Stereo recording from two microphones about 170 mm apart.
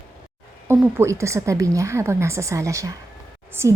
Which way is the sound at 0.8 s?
15° right (ahead or behind).